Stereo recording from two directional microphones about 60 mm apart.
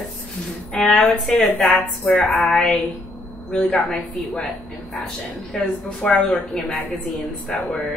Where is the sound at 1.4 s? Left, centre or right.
Left.